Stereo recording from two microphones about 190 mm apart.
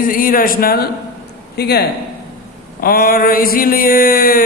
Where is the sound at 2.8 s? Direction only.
50° left (ahead or behind).